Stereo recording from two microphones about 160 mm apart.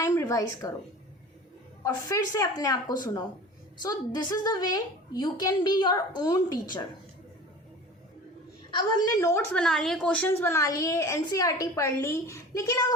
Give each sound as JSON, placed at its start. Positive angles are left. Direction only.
{"t": 0.0, "sound": "a sound", "side_deg": 20}
{"t": 1.8, "sound": "a woman's voice", "side_deg": 20}
{"t": 9.0, "sound": "a woman's voice", "side_deg": 15}